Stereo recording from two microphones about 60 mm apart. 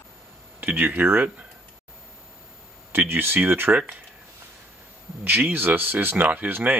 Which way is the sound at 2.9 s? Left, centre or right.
Right.